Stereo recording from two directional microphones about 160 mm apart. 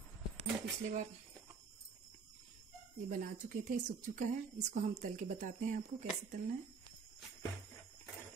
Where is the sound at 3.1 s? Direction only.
55° right (ahead or behind).